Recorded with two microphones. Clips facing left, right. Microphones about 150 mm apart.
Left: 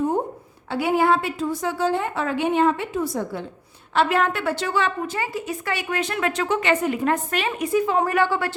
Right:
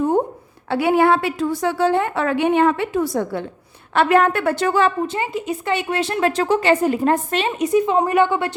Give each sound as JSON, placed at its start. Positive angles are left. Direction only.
{"t": 0.7, "sound": "a woman's voice", "side_deg": -65}
{"t": 3.9, "sound": "a woman's voice", "side_deg": -55}
{"t": 5.0, "sound": "a woman's voice", "side_deg": -25}